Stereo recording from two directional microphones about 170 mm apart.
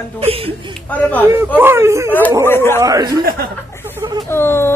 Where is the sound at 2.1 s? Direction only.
10° left (ahead or behind).